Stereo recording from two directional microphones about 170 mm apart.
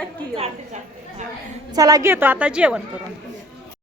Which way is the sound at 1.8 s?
20° right (ahead or behind).